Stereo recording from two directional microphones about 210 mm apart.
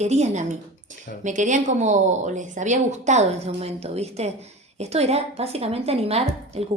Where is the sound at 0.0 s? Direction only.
30° right (ahead or behind).